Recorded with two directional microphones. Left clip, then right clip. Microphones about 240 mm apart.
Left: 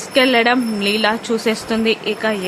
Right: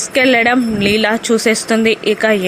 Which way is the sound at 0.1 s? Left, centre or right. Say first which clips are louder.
Right 2 dB; centre.